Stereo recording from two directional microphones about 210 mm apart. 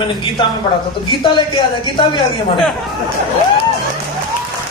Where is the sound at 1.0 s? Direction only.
25° left (ahead or behind).